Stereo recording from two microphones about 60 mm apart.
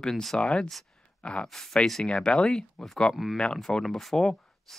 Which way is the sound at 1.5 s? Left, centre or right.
Centre.